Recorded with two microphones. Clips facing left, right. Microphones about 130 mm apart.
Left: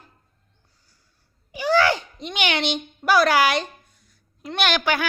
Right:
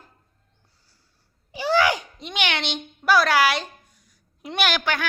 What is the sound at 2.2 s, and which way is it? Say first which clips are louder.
A child's voice: left 3 dB; centre (ahead or behind).